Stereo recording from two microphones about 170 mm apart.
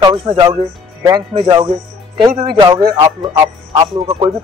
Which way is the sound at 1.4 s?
25° right (ahead or behind).